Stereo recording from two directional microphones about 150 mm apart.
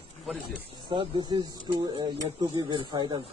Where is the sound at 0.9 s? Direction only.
35° right (ahead or behind).